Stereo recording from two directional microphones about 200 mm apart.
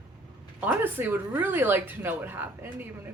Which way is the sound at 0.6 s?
10° right (ahead or behind).